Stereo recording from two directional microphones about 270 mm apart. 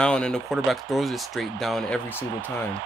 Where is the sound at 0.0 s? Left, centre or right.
Centre.